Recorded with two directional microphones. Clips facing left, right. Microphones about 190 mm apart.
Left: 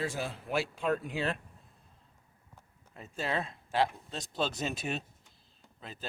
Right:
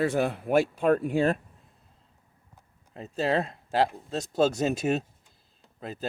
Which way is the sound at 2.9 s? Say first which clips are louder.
Right 8 dB; 35° right (ahead or behind).